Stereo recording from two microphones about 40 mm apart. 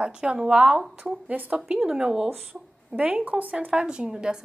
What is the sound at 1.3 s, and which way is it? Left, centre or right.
Speech, right.